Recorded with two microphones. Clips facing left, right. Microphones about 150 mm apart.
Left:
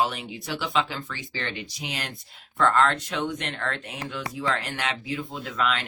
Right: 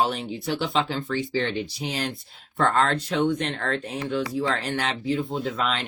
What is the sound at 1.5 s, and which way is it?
Speech, 30° right (ahead or behind).